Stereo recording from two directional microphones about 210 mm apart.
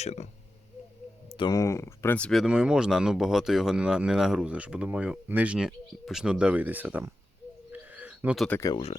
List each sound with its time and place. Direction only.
0.0 s speech: 30° left (ahead or behind)
1.3 s speech: 20° left (ahead or behind); by 7.1 s 10° right (ahead or behind)
7.7 s a sound: 10° right (ahead or behind)
8.4 s speech: 10° left (ahead or behind)
8.7 s speech: 30° left (ahead or behind)